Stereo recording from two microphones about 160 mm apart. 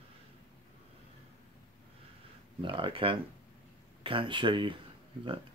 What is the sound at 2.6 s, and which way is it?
Speech, 30° right (ahead or behind).